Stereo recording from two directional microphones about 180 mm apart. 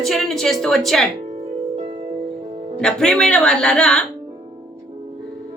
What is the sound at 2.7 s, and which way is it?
Speech, 5° left (ahead or behind).